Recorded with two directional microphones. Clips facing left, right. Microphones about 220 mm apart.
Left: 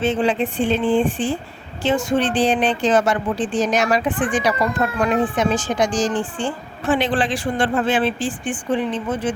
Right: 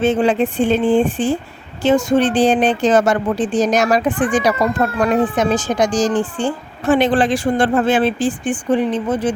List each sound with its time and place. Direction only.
0.0 s speech: 45° right (ahead or behind)